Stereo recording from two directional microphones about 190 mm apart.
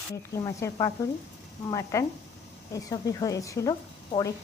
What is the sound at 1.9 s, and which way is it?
A woman's voice, 15° left (ahead or behind).